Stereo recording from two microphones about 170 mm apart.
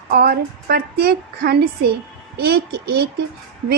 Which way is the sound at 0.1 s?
65° right (ahead or behind).